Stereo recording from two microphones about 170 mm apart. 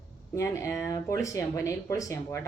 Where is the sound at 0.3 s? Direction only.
15° left (ahead or behind).